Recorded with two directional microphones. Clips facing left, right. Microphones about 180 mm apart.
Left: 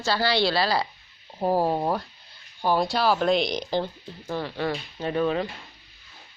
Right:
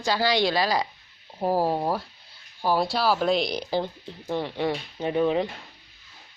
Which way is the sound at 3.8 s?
20° right (ahead or behind).